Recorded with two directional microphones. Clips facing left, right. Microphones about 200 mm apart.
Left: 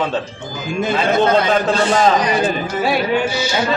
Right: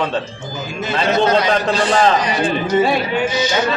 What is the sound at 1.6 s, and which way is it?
Speech, 5° left (ahead or behind).